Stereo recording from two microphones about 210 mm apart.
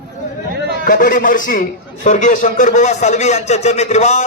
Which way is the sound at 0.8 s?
40° left (ahead or behind).